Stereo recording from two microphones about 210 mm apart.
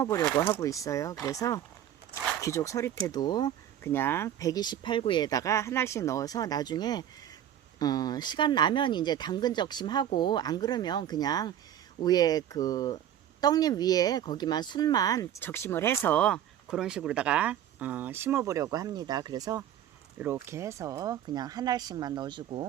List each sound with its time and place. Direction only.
0.0 s speech: 15° left (ahead or behind); by 22.6 s 20° right (ahead or behind)